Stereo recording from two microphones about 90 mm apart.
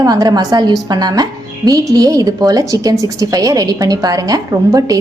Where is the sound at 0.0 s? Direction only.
45° right (ahead or behind).